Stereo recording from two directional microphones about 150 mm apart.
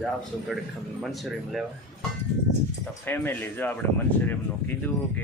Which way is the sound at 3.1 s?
10° left (ahead or behind).